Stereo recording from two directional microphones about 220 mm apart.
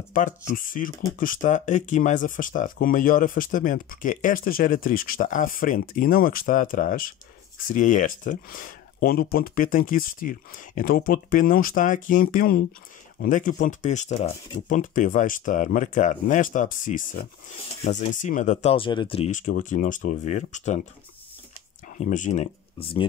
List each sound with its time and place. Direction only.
0.5 s speech: 40° left (ahead or behind)
21.8 s speech: 35° left (ahead or behind)